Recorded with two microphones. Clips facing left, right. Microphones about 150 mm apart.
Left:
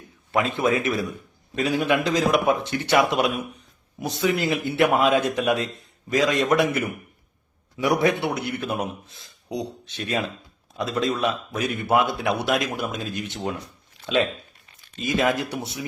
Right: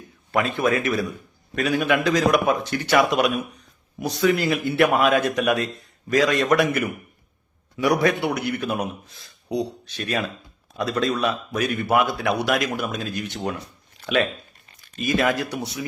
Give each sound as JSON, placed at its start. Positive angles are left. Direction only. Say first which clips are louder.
{"t": 0.3, "sound": "speech", "louder": "even", "side_deg": 20}
{"t": 14.9, "sound": "speech", "louder": "right 1 dB", "side_deg": 20}